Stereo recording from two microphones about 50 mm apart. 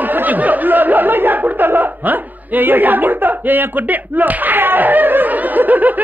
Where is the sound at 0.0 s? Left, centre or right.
Right.